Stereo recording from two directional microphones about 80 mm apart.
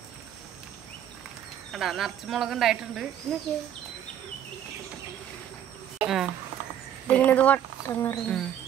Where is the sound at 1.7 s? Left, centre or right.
Centre.